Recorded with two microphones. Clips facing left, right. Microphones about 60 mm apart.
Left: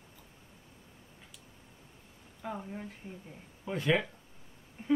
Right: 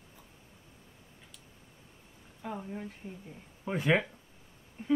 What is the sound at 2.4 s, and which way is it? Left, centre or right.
Speech, centre.